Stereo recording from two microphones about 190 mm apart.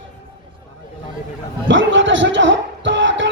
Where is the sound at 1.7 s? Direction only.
75° right (ahead or behind).